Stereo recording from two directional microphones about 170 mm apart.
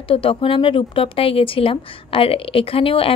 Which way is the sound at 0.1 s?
30° left (ahead or behind).